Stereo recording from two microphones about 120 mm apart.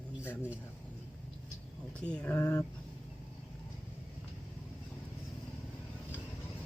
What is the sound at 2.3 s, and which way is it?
Speech, 25° left (ahead or behind).